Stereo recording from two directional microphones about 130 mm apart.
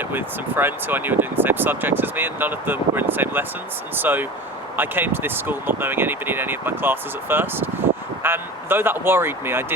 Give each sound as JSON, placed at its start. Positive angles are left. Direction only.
{"t": 0.1, "sound": "speech", "side_deg": -15}